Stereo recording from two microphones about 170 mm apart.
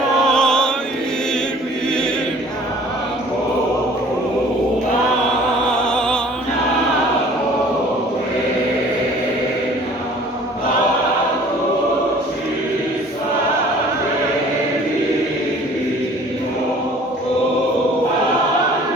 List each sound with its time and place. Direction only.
0.3 s music: 5° left (ahead or behind)
5.7 s music: 5° left (ahead or behind)